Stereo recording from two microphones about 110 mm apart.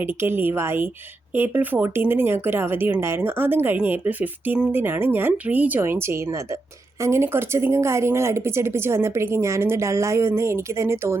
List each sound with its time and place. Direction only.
0.0 s speech: 20° right (ahead or behind)